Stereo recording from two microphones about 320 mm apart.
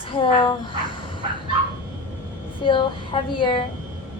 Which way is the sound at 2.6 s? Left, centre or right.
Centre.